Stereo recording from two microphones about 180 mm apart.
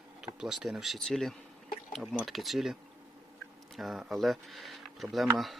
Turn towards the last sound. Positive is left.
turn(degrees=0)  # may be behind; listen again after turning